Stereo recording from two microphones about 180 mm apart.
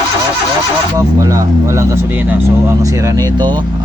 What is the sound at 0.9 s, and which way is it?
Speech, 20° right (ahead or behind).